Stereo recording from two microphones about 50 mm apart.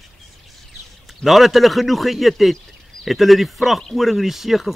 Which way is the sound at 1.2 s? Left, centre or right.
Centre.